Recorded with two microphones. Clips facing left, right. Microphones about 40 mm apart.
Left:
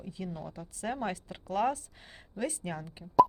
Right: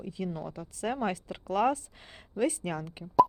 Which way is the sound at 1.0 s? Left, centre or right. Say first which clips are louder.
Right 3 dB; right.